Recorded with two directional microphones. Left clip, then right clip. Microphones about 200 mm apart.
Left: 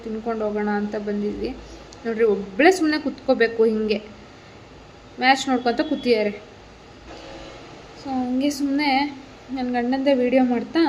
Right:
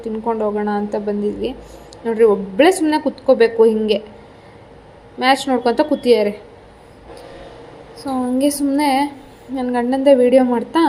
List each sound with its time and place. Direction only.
0.3 s a woman's voice: 10° right (ahead or behind)
5.2 s a woman's voice: 10° right (ahead or behind)
8.4 s a woman's voice: 20° right (ahead or behind)
8.8 s a sound: 20° right (ahead or behind)
9.6 s a woman's voice: 15° right (ahead or behind)